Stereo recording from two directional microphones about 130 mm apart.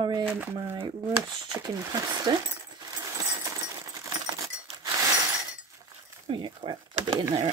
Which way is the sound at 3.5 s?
25° right (ahead or behind).